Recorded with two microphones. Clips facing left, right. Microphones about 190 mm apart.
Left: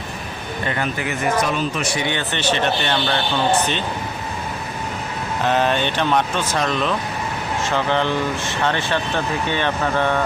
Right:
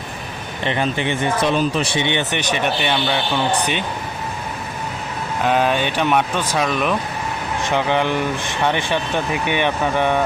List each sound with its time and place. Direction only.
0.6 s speech: 25° right (ahead or behind)
5.5 s speech: 10° right (ahead or behind)